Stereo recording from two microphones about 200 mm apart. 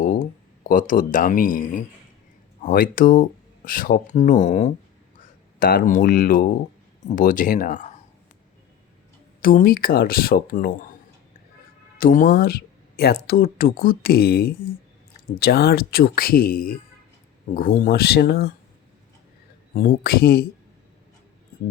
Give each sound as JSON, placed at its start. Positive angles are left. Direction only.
{"t": 0.0, "sound": "a sound", "side_deg": 45}
{"t": 0.7, "sound": "speech", "side_deg": 40}
{"t": 9.4, "sound": "speech", "side_deg": 45}
{"t": 11.9, "sound": "speech", "side_deg": 45}
{"t": 19.7, "sound": "speech", "side_deg": 45}